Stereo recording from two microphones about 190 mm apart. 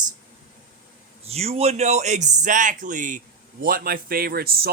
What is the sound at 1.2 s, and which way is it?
Speech, 35° right (ahead or behind).